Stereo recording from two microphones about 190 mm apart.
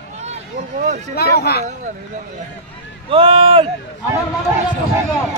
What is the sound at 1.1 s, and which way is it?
Speech, 55° left (ahead or behind).